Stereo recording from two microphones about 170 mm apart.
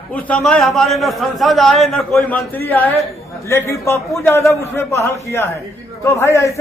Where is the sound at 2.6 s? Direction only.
10° left (ahead or behind).